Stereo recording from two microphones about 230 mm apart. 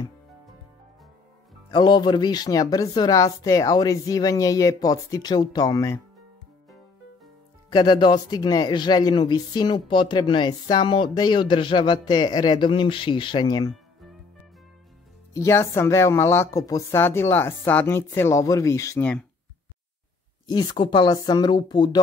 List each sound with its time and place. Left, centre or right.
1.7 s speech: centre
7.7 s speech: centre
15.3 s speech: centre
20.4 s speech: centre